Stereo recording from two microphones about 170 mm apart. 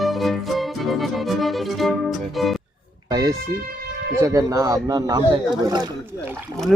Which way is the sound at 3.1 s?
25° right (ahead or behind).